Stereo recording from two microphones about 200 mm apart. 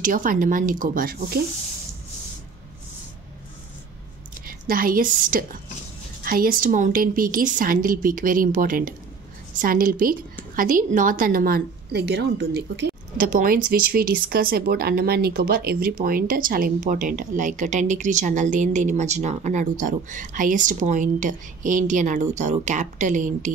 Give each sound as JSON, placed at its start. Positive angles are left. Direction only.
{"t": 0.0, "sound": "a woman's voice", "side_deg": -40}
{"t": 4.5, "sound": "a woman's voice", "side_deg": -45}
{"t": 13.3, "sound": "speech", "side_deg": -45}